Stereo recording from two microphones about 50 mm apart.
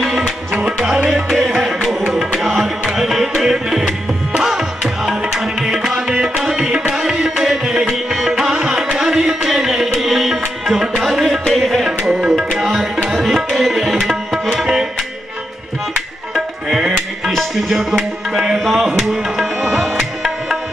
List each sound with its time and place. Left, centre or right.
0.5 s music: centre
12.1 s tabla: centre
13.1 s tabla: centre
16.3 s music: centre
18.3 s tabla: centre